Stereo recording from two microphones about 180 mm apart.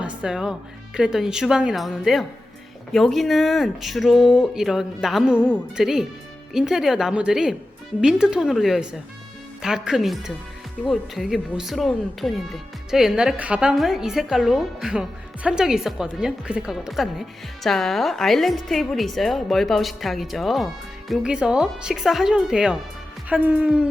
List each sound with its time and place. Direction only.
0.0 s music: 5° right (ahead or behind)
0.9 s a woman's voice: 5° right (ahead or behind)